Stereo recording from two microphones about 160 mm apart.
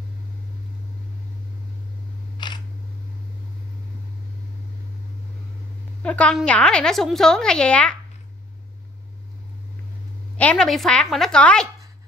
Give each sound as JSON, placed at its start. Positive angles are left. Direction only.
{"t": 2.3, "sound": "camera", "side_deg": 30}
{"t": 6.0, "sound": "a woman's voice", "side_deg": 5}
{"t": 10.3, "sound": "a woman's voice", "side_deg": 10}